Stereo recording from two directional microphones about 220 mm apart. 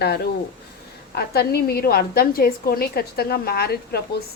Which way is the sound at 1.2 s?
45° left (ahead or behind).